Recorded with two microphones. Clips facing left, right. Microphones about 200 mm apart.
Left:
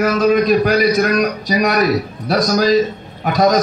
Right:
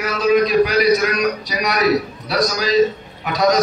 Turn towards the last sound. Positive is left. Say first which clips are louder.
# left 3 dB
turn(degrees=50)  # may be behind; listen again after turning